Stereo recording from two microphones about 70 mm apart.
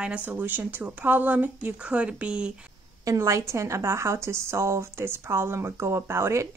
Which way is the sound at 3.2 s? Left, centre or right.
Right.